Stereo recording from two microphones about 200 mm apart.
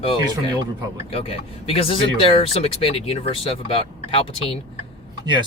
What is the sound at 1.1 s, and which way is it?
Speech, 30° left (ahead or behind).